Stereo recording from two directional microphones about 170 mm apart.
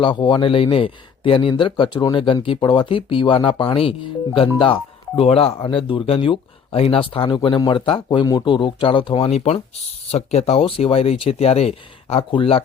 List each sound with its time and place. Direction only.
0.0 s speech: 30° left (ahead or behind)